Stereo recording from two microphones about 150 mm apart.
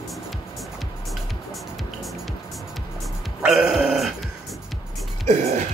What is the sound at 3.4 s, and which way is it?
Music, 5° right (ahead or behind).